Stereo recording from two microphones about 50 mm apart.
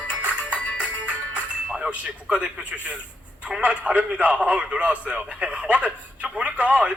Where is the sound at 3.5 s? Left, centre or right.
Centre.